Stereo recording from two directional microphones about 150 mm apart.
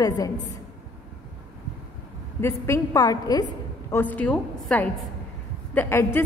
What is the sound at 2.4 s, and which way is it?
A woman's voice, 20° left (ahead or behind).